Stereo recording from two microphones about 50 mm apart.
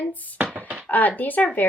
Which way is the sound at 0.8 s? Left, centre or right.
Left.